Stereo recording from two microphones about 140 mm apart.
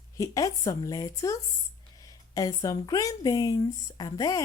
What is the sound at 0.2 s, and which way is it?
Speech, 25° left (ahead or behind).